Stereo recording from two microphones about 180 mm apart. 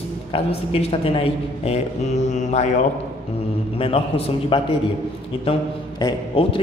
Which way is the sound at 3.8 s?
35° left (ahead or behind).